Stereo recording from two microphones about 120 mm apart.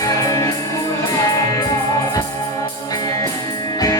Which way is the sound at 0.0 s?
25° left (ahead or behind).